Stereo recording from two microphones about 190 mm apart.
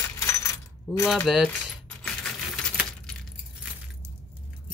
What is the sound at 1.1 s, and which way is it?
Speech, centre (ahead or behind).